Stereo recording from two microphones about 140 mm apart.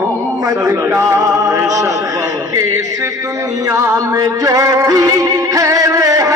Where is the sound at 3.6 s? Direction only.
20° right (ahead or behind).